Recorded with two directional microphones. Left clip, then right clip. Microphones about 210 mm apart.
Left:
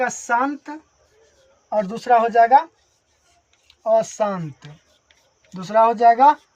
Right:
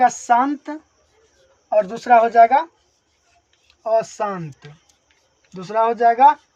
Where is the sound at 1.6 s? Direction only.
40° right (ahead or behind).